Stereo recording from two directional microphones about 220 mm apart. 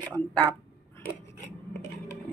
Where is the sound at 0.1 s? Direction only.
10° left (ahead or behind).